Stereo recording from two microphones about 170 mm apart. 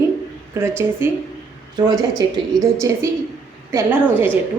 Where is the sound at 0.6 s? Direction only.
15° right (ahead or behind).